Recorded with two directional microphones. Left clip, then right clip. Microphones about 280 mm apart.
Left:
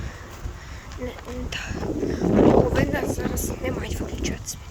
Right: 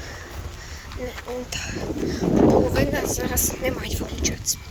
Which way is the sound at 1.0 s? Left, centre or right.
Centre.